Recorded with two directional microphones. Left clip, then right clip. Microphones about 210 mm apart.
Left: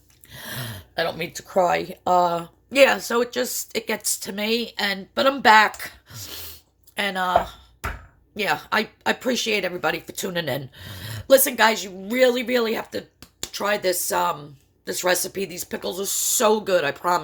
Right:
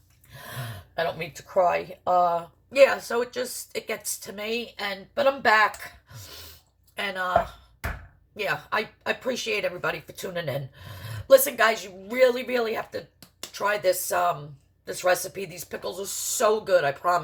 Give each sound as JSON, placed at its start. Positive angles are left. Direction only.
{"t": 0.3, "sound": "speech", "side_deg": 45}
{"t": 8.4, "sound": "speech", "side_deg": 45}